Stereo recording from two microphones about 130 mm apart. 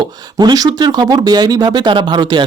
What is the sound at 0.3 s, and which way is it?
Speech, 30° right (ahead or behind).